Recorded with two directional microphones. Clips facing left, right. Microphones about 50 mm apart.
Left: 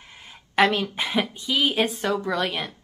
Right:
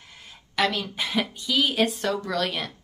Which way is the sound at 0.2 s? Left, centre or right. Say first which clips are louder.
Left 5 dB; left.